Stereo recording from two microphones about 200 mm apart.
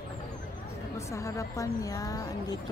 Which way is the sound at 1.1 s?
15° left (ahead or behind).